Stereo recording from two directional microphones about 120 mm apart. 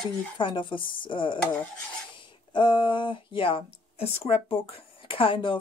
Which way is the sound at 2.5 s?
40° left (ahead or behind).